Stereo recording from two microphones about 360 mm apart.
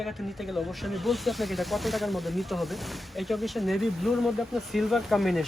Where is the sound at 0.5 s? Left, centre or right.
Centre.